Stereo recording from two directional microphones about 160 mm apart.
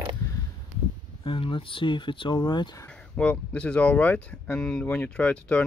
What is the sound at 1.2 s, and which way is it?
Speech, 35° left (ahead or behind).